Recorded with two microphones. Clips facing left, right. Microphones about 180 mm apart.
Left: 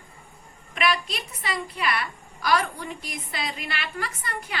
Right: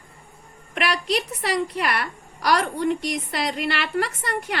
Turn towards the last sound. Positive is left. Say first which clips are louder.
# right 6 dB
turn(degrees=-70)  # may be behind; listen again after turning